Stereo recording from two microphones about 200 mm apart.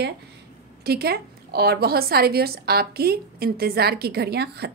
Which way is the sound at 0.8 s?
50° right (ahead or behind).